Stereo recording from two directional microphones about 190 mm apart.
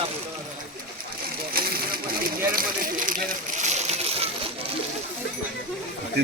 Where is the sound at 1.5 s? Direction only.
50° right (ahead or behind).